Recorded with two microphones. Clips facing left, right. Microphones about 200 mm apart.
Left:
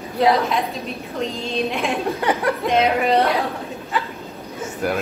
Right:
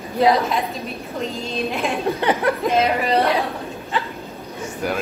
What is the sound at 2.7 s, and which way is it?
Speech, centre (ahead or behind).